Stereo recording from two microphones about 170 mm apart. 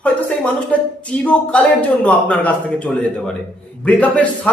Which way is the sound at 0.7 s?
5° left (ahead or behind).